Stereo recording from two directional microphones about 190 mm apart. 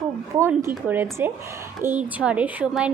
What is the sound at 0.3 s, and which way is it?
Speech, 15° right (ahead or behind).